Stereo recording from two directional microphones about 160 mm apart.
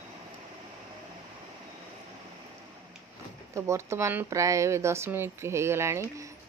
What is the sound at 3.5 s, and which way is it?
Speech, 15° right (ahead or behind).